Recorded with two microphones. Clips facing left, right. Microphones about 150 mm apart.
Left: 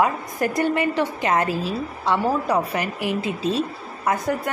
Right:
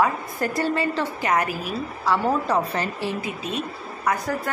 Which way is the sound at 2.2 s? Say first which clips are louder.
Left 1 dB; 10° left (ahead or behind).